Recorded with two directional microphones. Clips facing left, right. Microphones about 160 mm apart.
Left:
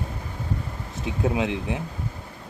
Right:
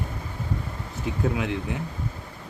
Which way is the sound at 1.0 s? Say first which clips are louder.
Left 2 dB; 20° left (ahead or behind).